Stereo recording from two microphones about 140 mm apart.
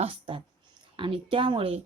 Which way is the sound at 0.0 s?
35° right (ahead or behind).